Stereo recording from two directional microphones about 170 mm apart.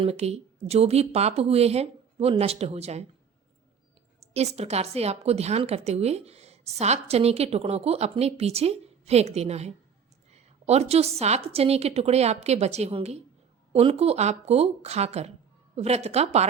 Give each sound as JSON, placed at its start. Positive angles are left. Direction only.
{"t": 0.0, "sound": "a woman's voice", "side_deg": -40}
{"t": 4.2, "sound": "a woman's voice", "side_deg": -40}